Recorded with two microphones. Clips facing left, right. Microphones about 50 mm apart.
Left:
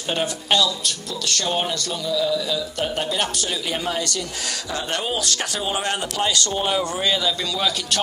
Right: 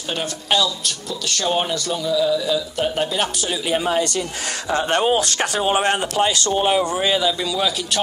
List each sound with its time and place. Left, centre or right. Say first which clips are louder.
0.5 s a man's voice: right 2 dB; centre
3.8 s speech: right 5 dB; right
4.6 s a man's voice: right 9 dB; right; by 8.0 s centre